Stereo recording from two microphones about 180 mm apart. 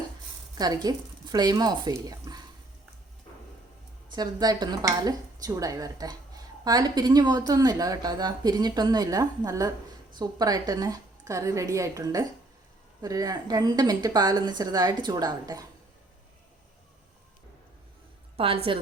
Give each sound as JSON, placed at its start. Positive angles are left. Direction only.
{"t": 0.5, "sound": "speech", "side_deg": -20}
{"t": 4.1, "sound": "a woman's voice", "side_deg": -20}
{"t": 18.3, "sound": "a woman's voice", "side_deg": -30}